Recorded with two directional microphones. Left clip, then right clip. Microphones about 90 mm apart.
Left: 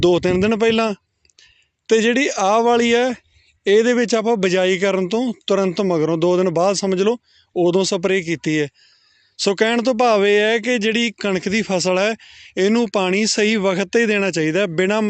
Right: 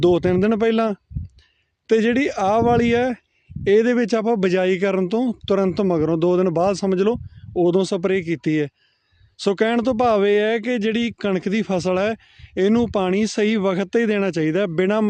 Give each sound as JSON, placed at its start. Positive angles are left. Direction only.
{"t": 0.0, "sound": "a man's voice", "side_deg": -40}